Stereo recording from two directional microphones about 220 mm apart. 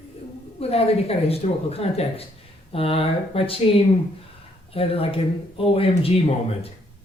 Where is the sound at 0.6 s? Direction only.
25° left (ahead or behind).